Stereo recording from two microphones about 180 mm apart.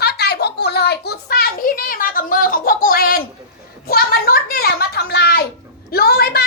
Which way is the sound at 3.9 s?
60° left (ahead or behind).